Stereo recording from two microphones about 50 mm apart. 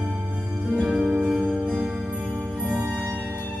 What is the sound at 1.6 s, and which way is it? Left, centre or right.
Music, centre.